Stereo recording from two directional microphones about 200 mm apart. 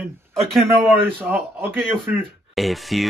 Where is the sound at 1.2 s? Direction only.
10° right (ahead or behind).